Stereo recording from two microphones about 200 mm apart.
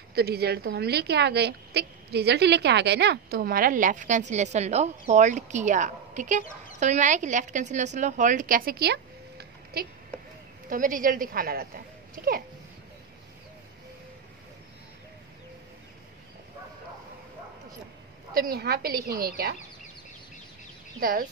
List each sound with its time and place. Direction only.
0.1 s a woman's voice: 50° right (ahead or behind)
18.3 s a woman's voice: 50° right (ahead or behind)
21.0 s a woman's voice: 45° right (ahead or behind)